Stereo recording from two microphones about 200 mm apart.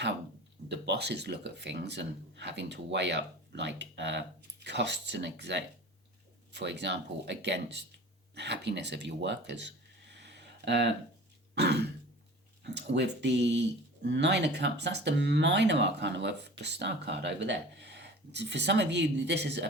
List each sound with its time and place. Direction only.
0.7 s speech: 55° right (ahead or behind)